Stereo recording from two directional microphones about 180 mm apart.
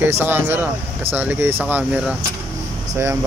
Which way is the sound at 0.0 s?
10° right (ahead or behind).